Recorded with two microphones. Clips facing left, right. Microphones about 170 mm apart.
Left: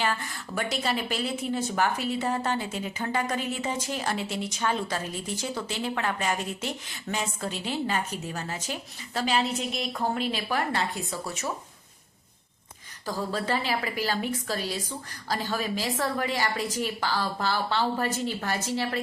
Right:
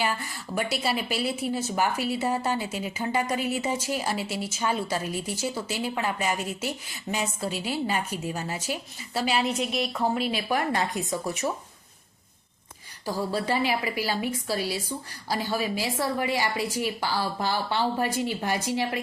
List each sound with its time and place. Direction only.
0.0 s a woman's voice: 10° right (ahead or behind)
13.1 s a woman's voice: 10° right (ahead or behind)